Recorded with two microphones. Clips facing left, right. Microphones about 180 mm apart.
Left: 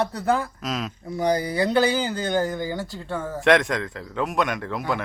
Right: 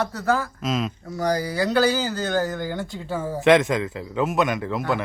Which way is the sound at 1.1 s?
25° left (ahead or behind).